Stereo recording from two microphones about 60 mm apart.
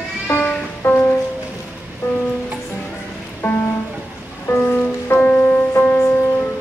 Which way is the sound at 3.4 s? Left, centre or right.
Left.